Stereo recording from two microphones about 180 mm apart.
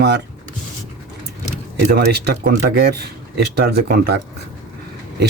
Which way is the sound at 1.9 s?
60° right (ahead or behind).